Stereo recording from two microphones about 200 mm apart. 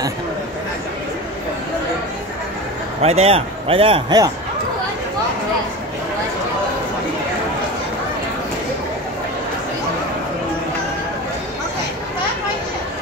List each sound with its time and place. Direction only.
3.0 s a man's voice: 30° right (ahead or behind)